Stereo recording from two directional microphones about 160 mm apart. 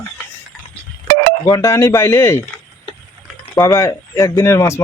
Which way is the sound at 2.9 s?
30° left (ahead or behind).